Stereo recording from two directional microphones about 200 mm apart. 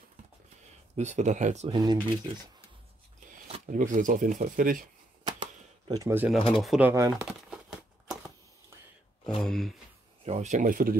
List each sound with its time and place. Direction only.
0.9 s speech: 35° right (ahead or behind)
1.7 s speech: 20° right (ahead or behind)
3.6 s speech: 40° right (ahead or behind)
5.2 s typewriter: 20° right (ahead or behind)
6.3 s speech: centre (ahead or behind); by 7.2 s 15° right (ahead or behind)
7.2 s crumpling: 5° right (ahead or behind)
9.2 s speech: centre (ahead or behind)
10.2 s speech: 35° right (ahead or behind)